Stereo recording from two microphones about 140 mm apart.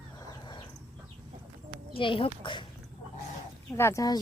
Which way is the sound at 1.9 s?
40° left (ahead or behind).